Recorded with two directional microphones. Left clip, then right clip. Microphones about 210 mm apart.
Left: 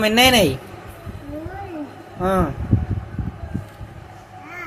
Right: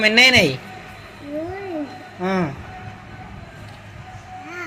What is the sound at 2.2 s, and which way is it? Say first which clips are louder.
Speech: left 3 dB; 25° left (ahead or behind).